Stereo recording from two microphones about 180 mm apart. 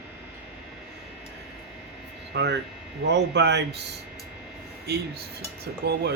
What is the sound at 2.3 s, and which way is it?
Speech, 70° right (ahead or behind).